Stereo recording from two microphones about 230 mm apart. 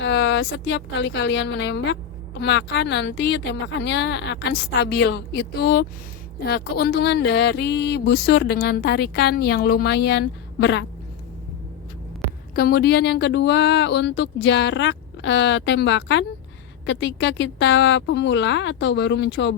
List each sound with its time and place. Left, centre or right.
0.0 s speech: left
12.5 s speech: left